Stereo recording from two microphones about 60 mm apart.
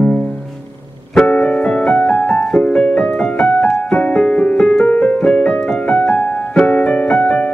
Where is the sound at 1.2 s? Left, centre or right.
Left.